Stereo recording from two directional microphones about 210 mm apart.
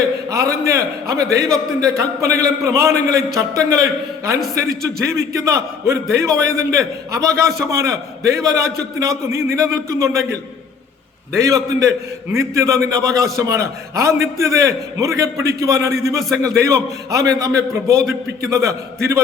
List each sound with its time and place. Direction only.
0.3 s a man's voice: 15° right (ahead or behind)
11.3 s a man's voice: 15° right (ahead or behind)